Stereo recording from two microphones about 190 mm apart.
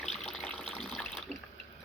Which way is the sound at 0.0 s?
Centre (ahead or behind).